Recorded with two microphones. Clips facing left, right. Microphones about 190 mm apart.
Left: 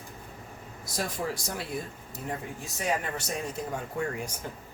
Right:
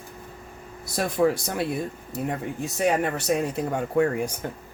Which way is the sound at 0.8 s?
60° right (ahead or behind).